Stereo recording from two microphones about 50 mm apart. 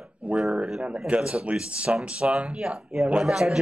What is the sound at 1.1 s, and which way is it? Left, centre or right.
Speech, right.